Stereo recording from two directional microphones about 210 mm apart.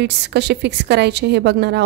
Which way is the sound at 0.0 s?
55° right (ahead or behind).